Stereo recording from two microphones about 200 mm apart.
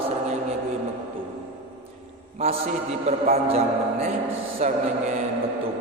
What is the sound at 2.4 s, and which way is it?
A man's voice, 30° right (ahead or behind).